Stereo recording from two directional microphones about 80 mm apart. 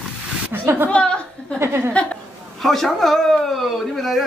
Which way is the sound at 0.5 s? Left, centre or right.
Right.